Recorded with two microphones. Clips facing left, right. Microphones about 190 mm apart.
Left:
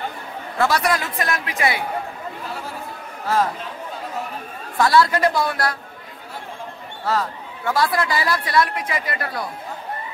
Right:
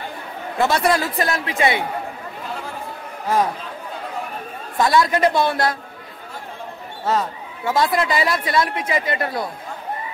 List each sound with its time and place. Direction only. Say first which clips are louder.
0.6 s speech: right 2 dB; 25° right (ahead or behind)
4.7 s speech: even; 20° right (ahead or behind)
7.1 s speech: right 2 dB; 20° right (ahead or behind)